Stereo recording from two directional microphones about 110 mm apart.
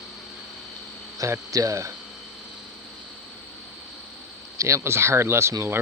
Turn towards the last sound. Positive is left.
turn(degrees=-25)  # may be behind; listen again after turning